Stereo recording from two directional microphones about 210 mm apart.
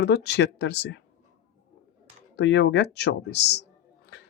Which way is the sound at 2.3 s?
55° left (ahead or behind).